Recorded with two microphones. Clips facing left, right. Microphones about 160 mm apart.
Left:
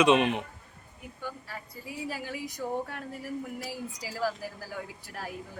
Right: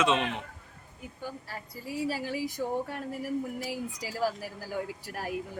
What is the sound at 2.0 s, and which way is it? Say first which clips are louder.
Speech: right 4 dB; 30° right (ahead or behind).